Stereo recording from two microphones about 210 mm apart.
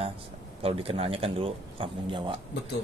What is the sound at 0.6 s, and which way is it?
Speech, 25° right (ahead or behind).